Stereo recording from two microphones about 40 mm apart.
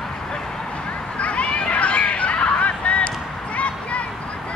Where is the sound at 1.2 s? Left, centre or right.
Left.